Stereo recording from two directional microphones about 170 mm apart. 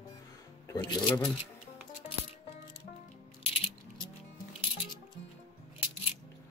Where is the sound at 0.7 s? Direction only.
25° left (ahead or behind).